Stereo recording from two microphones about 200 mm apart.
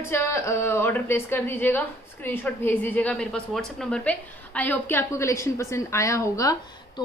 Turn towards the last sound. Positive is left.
turn(degrees=15)  # may be behind; listen again after turning